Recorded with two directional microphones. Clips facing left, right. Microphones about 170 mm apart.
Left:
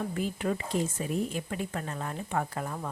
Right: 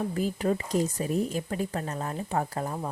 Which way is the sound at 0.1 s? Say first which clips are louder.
Right 4 dB; 40° right (ahead or behind).